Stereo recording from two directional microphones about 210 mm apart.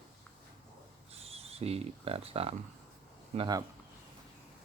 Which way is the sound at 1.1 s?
30° right (ahead or behind).